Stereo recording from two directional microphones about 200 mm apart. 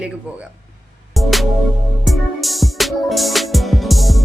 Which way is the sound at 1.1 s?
Centre (ahead or behind).